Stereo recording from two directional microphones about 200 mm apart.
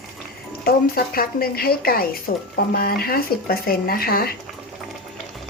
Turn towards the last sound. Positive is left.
turn(degrees=50)  # may be behind; listen again after turning